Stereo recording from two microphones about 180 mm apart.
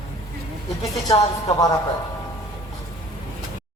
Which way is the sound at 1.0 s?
20° left (ahead or behind).